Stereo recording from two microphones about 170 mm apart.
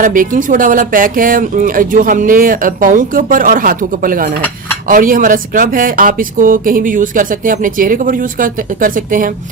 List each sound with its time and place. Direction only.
0.0 s speech: 50° right (ahead or behind)